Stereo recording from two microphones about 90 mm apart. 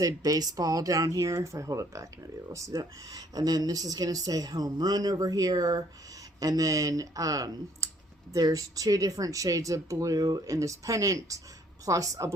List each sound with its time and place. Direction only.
0.0 s speech: 45° right (ahead or behind)